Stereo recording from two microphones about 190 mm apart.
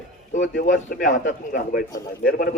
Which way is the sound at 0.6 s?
45° left (ahead or behind).